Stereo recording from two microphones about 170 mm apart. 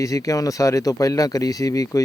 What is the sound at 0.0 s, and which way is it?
Speech, 20° left (ahead or behind).